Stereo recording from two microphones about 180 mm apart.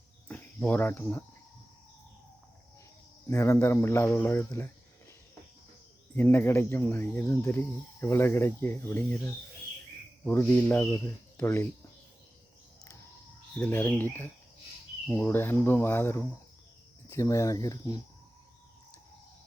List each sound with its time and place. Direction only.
0.3 s speech: 10° left (ahead or behind)
3.2 s speech: 15° left (ahead or behind)
6.1 s speech: 10° left (ahead or behind)
13.6 s speech: 10° left (ahead or behind)